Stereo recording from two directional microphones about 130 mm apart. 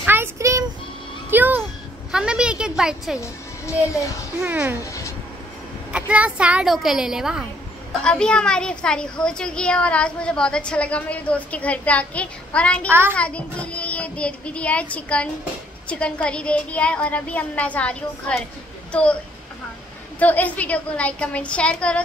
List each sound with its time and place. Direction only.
0.0 s child singing: 15° right (ahead or behind)
1.3 s a sound: 15° right (ahead or behind)
2.1 s a woman's voice: 5° right (ahead or behind)
3.2 s speech: 25° left (ahead or behind)
4.4 s speech: 15° right (ahead or behind)
5.9 s a woman's voice: 10° right (ahead or behind)
8.0 s a child's voice: 5° left (ahead or behind)
20.2 s a child's voice: 10° left (ahead or behind)